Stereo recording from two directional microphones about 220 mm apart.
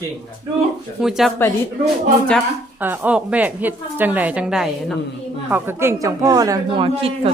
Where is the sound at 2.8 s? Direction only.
5° right (ahead or behind).